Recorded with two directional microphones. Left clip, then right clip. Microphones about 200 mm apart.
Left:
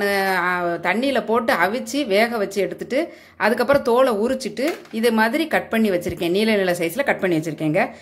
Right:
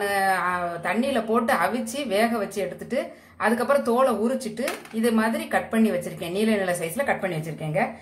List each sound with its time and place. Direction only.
0.0 s speech: 40° left (ahead or behind)